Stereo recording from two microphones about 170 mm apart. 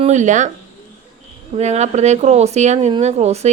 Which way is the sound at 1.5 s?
40° right (ahead or behind).